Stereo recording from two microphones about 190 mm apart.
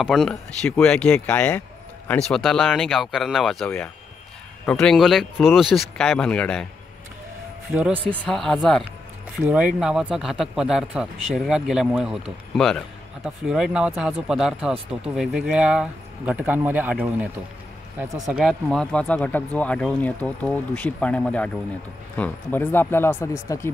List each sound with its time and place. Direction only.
0.0 s speech: centre (ahead or behind)
7.7 s speech: 10° right (ahead or behind)
8.1 s speech: 5° left (ahead or behind)
17.9 s speech: centre (ahead or behind); by 23.7 s 15° left (ahead or behind)